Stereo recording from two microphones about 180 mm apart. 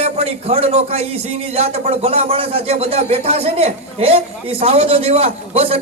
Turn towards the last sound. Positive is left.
turn(degrees=-35)  # may be behind; listen again after turning